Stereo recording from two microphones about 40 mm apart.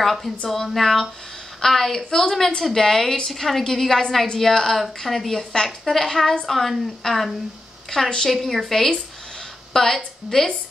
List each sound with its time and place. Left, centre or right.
0.0 s a woman's voice: centre
9.7 s a sound: centre
10.3 s a woman's voice: centre